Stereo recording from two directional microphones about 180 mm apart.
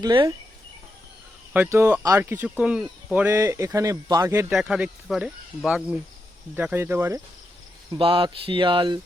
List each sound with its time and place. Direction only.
0.0 s speech: 25° right (ahead or behind)
1.5 s speech: 10° right (ahead or behind)
7.9 s speech: 30° right (ahead or behind)